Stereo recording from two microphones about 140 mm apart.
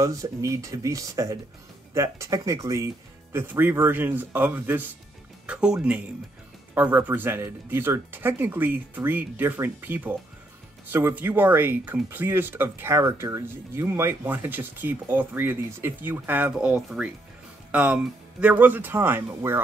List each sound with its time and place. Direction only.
0.0 s speech: 25° right (ahead or behind)